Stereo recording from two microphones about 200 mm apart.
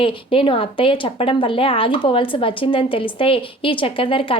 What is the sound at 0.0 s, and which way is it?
Speech, 25° left (ahead or behind).